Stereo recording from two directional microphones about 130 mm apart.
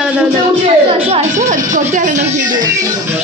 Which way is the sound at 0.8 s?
45° right (ahead or behind).